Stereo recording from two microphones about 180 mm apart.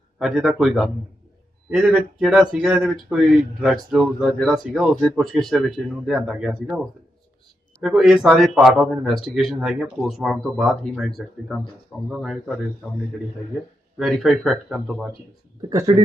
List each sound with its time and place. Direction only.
0.2 s a man's voice: centre (ahead or behind)
14.0 s a man's voice: centre (ahead or behind)
15.7 s speech: 20° right (ahead or behind)